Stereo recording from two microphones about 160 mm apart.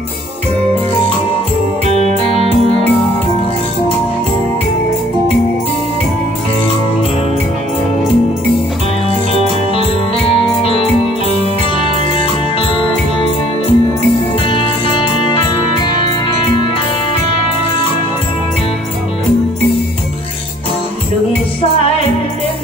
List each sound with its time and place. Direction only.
1.9 s music: 40° left (ahead or behind)
10.6 s music: 35° left (ahead or behind)